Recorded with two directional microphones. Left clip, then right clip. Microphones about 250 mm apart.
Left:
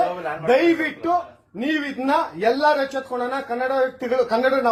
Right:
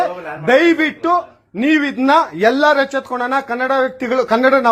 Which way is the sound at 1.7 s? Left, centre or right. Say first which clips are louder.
Right 8 dB; right.